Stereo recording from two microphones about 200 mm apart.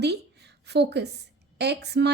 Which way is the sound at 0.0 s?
55° right (ahead or behind).